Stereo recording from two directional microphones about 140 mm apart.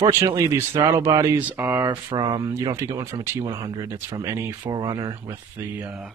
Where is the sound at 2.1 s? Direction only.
30° right (ahead or behind); by 6.1 s 10° right (ahead or behind).